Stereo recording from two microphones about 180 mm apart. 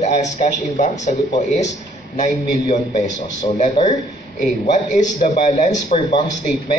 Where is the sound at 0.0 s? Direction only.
40° left (ahead or behind).